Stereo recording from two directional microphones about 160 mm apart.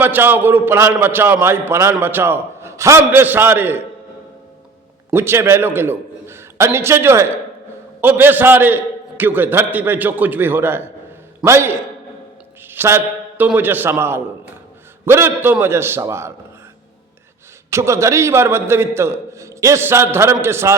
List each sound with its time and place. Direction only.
0.0 s a man's voice: 10° right (ahead or behind)
5.1 s a man's voice: 15° right (ahead or behind)
17.7 s a man's voice: 20° right (ahead or behind)